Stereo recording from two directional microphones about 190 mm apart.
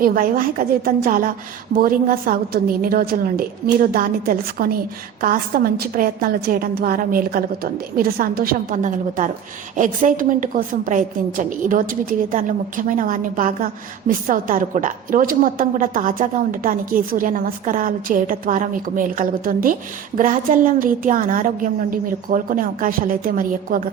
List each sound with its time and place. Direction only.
0.0 s a woman's voice: 50° right (ahead or behind)